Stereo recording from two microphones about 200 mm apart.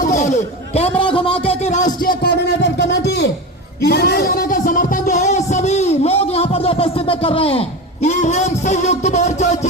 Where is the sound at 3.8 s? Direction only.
50° left (ahead or behind); by 7.6 s 25° left (ahead or behind).